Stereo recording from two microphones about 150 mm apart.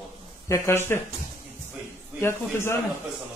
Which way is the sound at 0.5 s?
15° left (ahead or behind).